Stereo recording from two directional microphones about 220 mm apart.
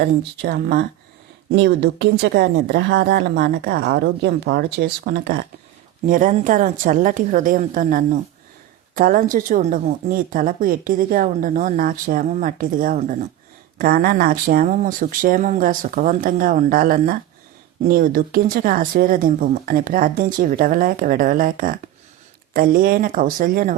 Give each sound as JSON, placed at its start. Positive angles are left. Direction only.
{"t": 0.0, "sound": "a woman's voice", "side_deg": -45}